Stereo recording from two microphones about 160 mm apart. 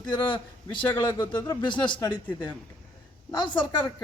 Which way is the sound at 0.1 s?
30° left (ahead or behind).